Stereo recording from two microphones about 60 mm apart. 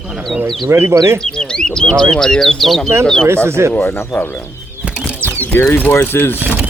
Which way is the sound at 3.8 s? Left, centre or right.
Left.